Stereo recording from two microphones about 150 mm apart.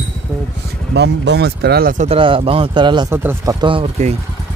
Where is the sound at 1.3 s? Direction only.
90° right.